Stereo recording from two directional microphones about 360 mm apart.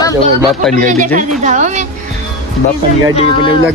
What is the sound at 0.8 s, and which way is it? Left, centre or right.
Speech, right.